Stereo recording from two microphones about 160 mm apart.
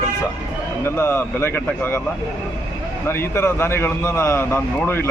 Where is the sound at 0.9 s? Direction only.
15° left (ahead or behind).